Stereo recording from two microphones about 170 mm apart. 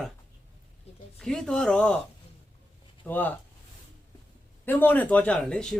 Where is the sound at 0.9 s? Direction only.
40° left (ahead or behind).